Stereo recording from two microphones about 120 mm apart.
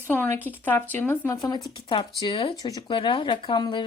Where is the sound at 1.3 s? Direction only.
30° left (ahead or behind).